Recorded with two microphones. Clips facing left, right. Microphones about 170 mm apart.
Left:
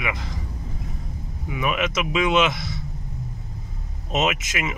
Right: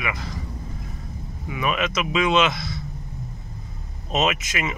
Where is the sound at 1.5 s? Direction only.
15° left (ahead or behind).